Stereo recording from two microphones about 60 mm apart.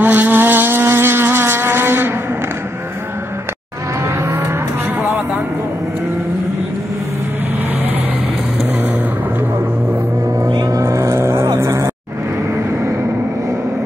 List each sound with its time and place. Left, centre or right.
0.0 s vehicle: right
10.8 s vehicle: right